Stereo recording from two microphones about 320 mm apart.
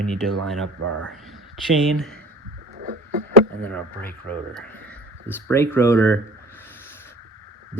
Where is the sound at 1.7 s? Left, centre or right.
Centre.